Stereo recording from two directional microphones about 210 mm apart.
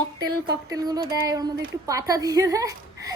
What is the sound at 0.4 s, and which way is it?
A woman's voice, 20° right (ahead or behind).